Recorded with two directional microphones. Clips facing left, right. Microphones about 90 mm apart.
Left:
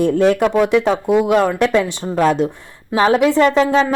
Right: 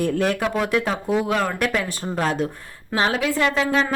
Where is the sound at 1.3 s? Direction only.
25° left (ahead or behind).